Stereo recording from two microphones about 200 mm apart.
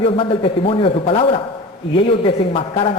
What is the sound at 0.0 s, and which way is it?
A woman's voice, 30° left (ahead or behind).